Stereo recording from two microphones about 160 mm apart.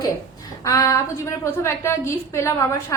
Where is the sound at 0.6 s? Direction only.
20° left (ahead or behind).